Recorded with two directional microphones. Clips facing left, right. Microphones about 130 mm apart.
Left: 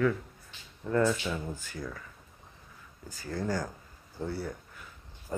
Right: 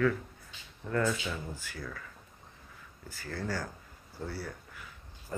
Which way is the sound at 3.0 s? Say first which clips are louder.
Left 4 dB; 15° left (ahead or behind).